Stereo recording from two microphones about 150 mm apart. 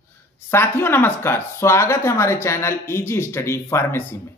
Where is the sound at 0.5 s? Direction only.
15° left (ahead or behind).